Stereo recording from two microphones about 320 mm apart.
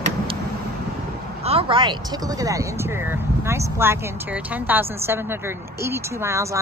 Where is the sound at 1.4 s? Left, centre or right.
Centre.